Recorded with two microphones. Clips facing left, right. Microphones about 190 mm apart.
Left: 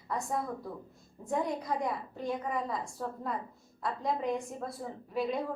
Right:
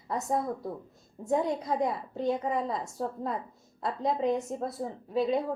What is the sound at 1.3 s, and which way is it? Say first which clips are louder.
A woman's voice: right 4 dB; 25° right (ahead or behind).